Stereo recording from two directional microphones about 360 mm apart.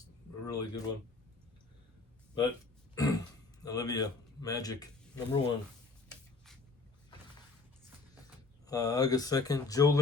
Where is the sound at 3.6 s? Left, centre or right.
Centre.